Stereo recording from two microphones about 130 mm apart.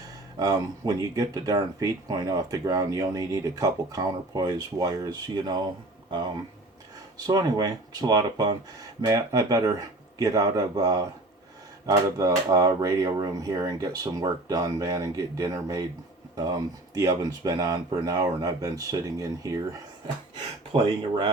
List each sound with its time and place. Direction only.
0.3 s speech: 30° right (ahead or behind)